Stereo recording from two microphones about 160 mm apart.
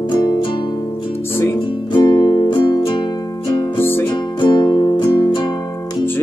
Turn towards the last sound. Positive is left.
turn(degrees=15)  # may be behind; listen again after turning